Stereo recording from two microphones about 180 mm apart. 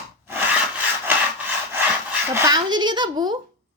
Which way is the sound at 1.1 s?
10° right (ahead or behind).